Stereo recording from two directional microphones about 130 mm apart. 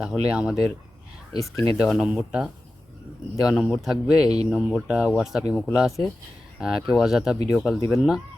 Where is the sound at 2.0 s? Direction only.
10° right (ahead or behind).